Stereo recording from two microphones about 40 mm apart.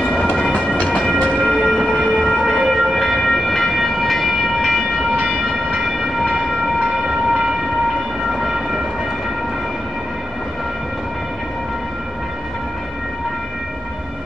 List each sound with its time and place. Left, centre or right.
0.3 s train: left
2.1 s train: centre
7.1 s train: centre